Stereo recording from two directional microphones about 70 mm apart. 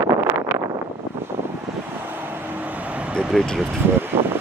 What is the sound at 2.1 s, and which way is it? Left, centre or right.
Vehicle, right.